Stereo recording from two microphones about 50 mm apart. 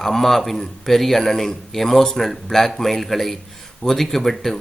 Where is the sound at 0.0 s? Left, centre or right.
Centre.